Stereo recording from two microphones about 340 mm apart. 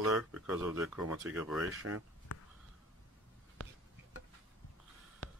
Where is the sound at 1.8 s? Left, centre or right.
Right.